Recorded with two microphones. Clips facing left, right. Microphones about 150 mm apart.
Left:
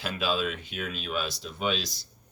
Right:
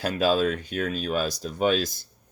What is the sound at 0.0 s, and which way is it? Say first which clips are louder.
Speech: right 7 dB; 40° right (ahead or behind).